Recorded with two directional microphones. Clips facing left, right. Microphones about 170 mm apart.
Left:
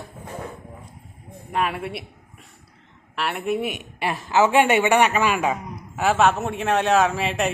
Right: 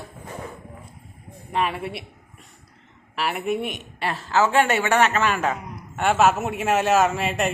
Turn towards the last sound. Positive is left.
turn(degrees=0)  # may be behind; listen again after turning